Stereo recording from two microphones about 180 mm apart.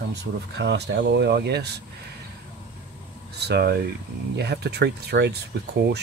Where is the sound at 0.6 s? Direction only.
75° right (ahead or behind).